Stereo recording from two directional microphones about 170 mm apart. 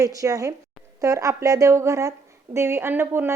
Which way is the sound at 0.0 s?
20° right (ahead or behind).